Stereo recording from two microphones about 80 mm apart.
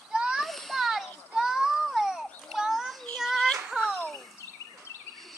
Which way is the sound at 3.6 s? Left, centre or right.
Centre.